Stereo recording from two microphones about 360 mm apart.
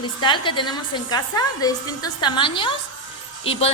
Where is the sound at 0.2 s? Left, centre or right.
Centre.